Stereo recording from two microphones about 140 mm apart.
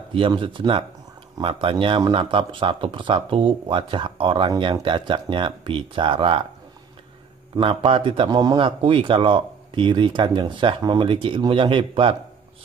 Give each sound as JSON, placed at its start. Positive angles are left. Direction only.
{"t": 0.1, "sound": "speech", "side_deg": -35}
{"t": 7.6, "sound": "speech", "side_deg": -40}